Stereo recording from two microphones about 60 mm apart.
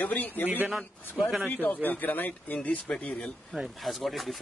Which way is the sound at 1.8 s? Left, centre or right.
Left.